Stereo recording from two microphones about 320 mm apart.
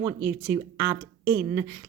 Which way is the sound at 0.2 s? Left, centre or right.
Right.